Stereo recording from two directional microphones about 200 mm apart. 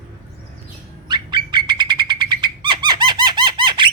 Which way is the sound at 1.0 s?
20° right (ahead or behind).